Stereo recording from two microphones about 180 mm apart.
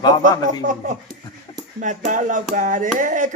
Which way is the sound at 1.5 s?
25° left (ahead or behind).